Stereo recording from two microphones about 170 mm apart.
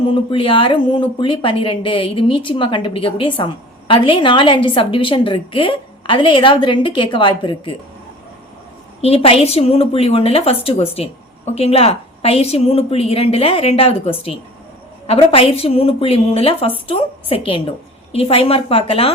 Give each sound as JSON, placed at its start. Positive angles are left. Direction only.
{"t": 0.1, "sound": "speech", "side_deg": 30}
{"t": 9.0, "sound": "a woman's voice", "side_deg": 35}